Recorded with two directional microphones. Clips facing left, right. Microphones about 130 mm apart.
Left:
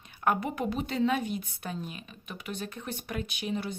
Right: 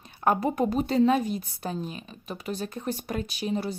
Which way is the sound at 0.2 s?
35° right (ahead or behind).